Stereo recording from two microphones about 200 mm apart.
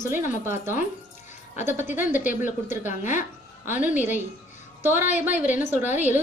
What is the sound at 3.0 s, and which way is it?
Speech, 40° left (ahead or behind).